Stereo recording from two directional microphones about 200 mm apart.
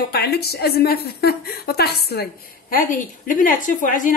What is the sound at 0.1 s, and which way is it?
A woman's voice, 55° left (ahead or behind).